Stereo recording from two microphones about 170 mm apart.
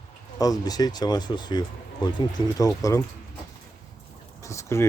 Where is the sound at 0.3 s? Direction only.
20° left (ahead or behind).